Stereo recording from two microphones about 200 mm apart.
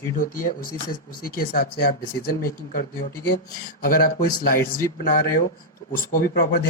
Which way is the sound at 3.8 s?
45° left (ahead or behind).